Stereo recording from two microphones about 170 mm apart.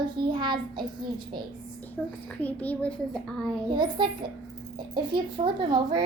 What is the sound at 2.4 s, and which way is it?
Speech, 10° left (ahead or behind).